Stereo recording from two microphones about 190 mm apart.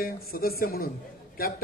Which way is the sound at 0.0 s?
50° left (ahead or behind).